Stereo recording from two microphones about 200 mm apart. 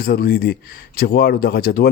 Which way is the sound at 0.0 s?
50° left (ahead or behind).